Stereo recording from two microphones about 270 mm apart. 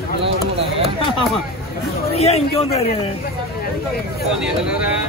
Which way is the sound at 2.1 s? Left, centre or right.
Left.